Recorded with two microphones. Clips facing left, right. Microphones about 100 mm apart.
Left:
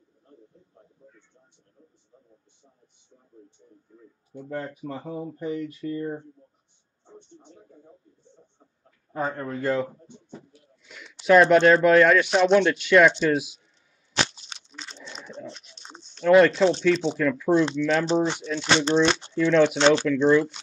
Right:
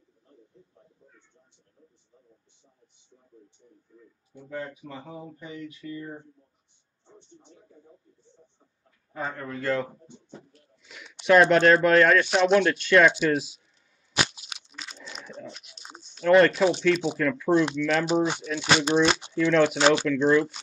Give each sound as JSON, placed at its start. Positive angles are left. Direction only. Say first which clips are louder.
{"t": 1.0, "sound": "a sound", "louder": "left 8 dB", "side_deg": 40}
{"t": 3.9, "sound": "speech", "louder": "left 8 dB", "side_deg": 40}
{"t": 9.1, "sound": "speech", "louder": "left 5 dB", "side_deg": 35}
{"t": 9.6, "sound": "speech", "louder": "left 2 dB", "side_deg": 15}
{"t": 11.1, "sound": "a sound", "louder": "left 2 dB", "side_deg": 0}
{"t": 11.6, "sound": "speech", "louder": "left 2 dB", "side_deg": 0}
{"t": 13.1, "sound": "speech", "louder": "left 1 dB", "side_deg": -10}
{"t": 14.1, "sound": "crunch", "louder": "left 1 dB", "side_deg": -10}
{"t": 16.8, "sound": "speech", "louder": "left 2 dB", "side_deg": -5}